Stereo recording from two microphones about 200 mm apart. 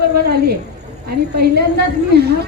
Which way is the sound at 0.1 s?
55° right (ahead or behind).